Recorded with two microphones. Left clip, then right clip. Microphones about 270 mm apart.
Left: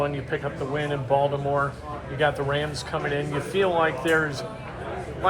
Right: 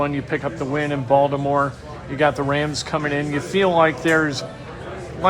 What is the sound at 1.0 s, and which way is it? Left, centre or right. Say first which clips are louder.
Speech: right 6 dB; right.